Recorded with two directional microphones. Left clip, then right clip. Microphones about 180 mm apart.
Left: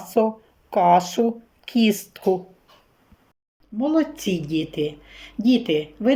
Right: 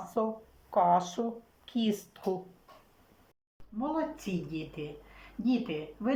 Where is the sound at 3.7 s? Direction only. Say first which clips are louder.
Left 11 dB; 55° left (ahead or behind).